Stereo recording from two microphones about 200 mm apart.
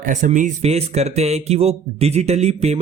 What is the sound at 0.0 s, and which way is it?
Speech, 40° right (ahead or behind).